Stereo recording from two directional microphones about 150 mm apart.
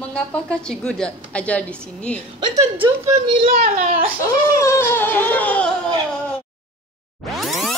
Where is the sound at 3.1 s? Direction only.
35° right (ahead or behind).